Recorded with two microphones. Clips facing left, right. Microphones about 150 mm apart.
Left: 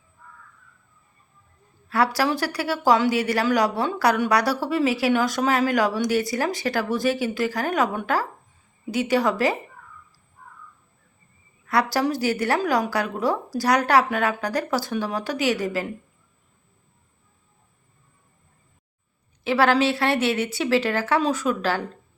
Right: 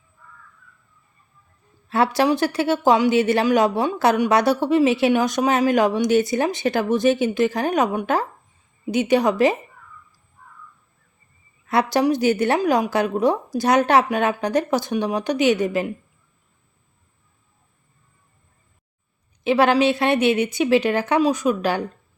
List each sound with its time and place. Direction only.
1.9 s a woman's voice: 25° right (ahead or behind)
11.6 s a woman's voice: 20° right (ahead or behind)
19.5 s a woman's voice: 20° right (ahead or behind)